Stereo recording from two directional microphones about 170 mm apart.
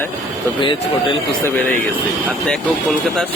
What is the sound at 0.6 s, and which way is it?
Speech, 30° left (ahead or behind).